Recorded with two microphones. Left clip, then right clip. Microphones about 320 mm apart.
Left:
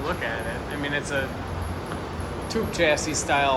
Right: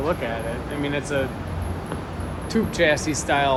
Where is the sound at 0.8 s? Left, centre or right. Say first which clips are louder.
Right 2 dB; centre.